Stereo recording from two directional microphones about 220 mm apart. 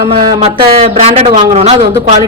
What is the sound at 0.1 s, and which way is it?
A woman's voice, 25° right (ahead or behind).